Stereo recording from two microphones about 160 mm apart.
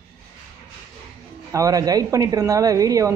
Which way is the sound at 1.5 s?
20° right (ahead or behind).